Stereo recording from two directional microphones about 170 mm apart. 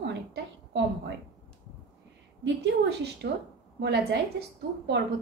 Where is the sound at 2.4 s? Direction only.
85° right.